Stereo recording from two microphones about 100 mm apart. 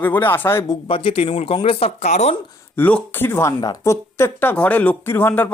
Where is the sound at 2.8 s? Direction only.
15° left (ahead or behind).